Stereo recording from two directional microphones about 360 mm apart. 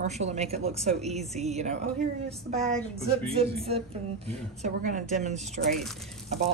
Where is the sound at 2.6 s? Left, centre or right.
Centre.